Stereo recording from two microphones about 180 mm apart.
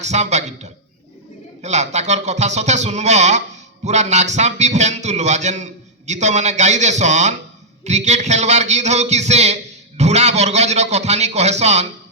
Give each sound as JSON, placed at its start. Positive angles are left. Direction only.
{"t": 0.0, "sound": "a man's voice", "side_deg": -40}